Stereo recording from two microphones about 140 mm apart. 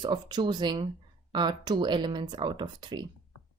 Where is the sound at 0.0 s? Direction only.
30° right (ahead or behind).